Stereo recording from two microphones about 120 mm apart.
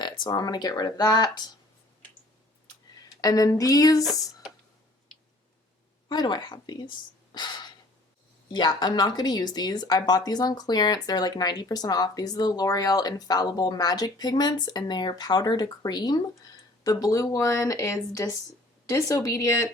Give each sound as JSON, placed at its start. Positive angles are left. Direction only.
{"t": 0.0, "sound": "speech", "side_deg": 35}
{"t": 3.2, "sound": "speech", "side_deg": 30}
{"t": 6.1, "sound": "speech", "side_deg": 35}
{"t": 7.3, "sound": "breathing", "side_deg": 40}
{"t": 8.5, "sound": "speech", "side_deg": 35}